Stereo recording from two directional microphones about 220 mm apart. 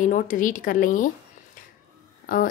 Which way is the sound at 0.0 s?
35° left (ahead or behind).